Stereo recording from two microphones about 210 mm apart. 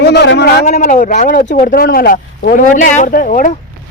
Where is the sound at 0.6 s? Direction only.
40° left (ahead or behind).